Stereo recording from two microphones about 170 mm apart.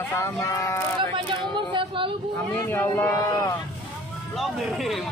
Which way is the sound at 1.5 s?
30° right (ahead or behind).